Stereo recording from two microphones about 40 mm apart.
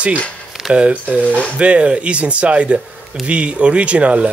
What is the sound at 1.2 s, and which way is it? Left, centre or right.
Speech, left.